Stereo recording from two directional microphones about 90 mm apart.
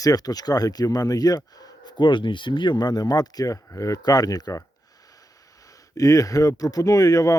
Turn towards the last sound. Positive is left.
turn(degrees=40)  # may be behind; listen again after turning